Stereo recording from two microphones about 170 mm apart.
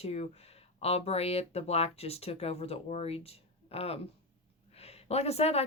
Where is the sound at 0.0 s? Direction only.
40° left (ahead or behind).